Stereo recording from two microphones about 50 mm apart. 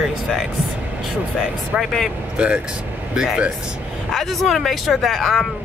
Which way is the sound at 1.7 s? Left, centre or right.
Centre.